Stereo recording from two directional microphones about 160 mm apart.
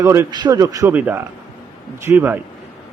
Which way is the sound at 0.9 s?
10° right (ahead or behind).